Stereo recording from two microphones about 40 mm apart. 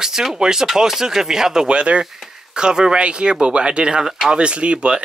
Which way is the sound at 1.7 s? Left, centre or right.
Right.